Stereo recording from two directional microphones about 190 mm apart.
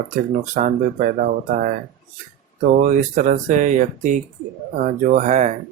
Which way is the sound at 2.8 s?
45° right (ahead or behind).